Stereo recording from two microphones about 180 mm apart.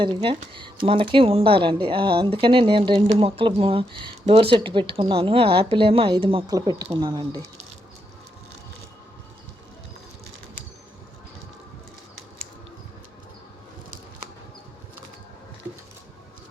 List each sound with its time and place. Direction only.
0.0 s speech: 30° right (ahead or behind)